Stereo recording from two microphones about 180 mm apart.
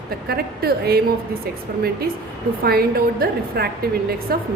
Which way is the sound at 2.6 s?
60° right (ahead or behind).